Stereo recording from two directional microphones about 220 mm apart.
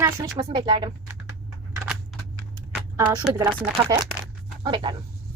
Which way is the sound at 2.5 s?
15° right (ahead or behind).